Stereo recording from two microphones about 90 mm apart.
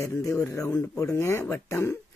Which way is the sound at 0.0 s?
35° left (ahead or behind).